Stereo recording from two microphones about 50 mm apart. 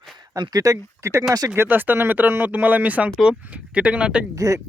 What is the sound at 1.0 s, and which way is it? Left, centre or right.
Speech, right.